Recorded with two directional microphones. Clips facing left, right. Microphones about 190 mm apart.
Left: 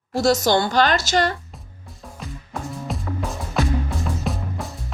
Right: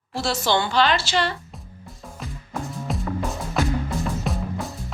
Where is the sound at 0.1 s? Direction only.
40° left (ahead or behind).